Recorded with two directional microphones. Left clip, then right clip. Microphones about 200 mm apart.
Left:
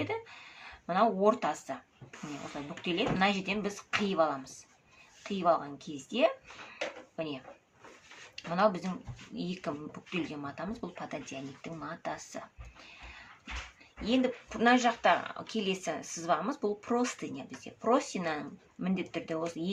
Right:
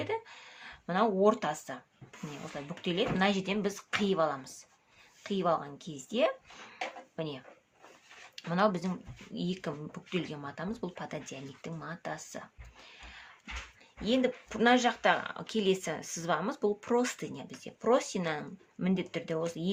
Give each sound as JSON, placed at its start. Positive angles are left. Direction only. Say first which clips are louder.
{"t": 0.0, "sound": "a sound", "louder": "right 1 dB", "side_deg": -35}
{"t": 0.9, "sound": "speech", "louder": "even", "side_deg": -35}
{"t": 2.8, "sound": "speech", "louder": "even", "side_deg": -40}
{"t": 14.0, "sound": "speech", "louder": "right 1 dB", "side_deg": -40}